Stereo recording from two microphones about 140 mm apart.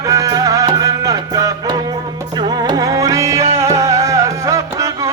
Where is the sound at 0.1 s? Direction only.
25° right (ahead or behind).